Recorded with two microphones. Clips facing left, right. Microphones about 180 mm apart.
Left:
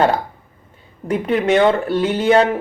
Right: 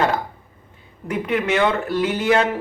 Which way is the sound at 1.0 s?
35° left (ahead or behind).